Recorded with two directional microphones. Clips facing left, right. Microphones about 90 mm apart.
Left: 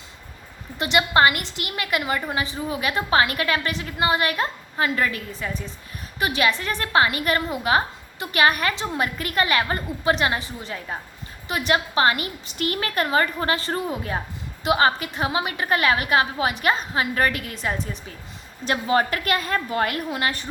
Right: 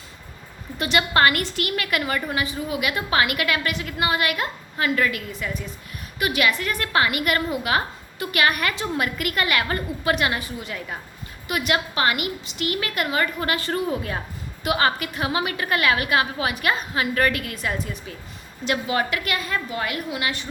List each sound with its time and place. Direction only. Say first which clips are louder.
0.8 s a woman's voice: left 1 dB; 20° left (ahead or behind); by 20.5 s 40° left (ahead or behind)